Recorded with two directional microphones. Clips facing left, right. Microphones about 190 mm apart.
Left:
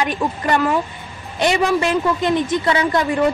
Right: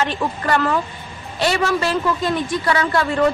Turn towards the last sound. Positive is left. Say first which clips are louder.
# left 1 dB
turn(degrees=15)  # may be behind; listen again after turning